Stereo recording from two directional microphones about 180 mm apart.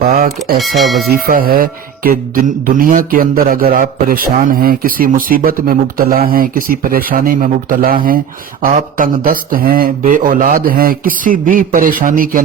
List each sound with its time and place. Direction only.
0.0 s music: 50° right (ahead or behind)
0.6 s speech: centre (ahead or behind)
1.1 s speech: 55° right (ahead or behind)